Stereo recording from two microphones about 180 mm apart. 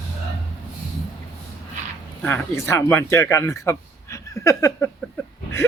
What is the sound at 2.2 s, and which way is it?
Speech, 10° left (ahead or behind).